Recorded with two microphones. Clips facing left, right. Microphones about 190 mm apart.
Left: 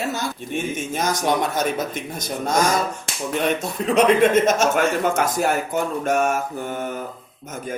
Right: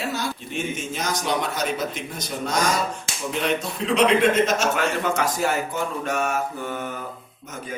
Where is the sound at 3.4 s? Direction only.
50° left (ahead or behind).